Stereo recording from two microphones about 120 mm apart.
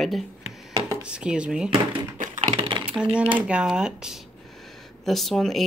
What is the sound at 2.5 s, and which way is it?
Speech, 40° right (ahead or behind).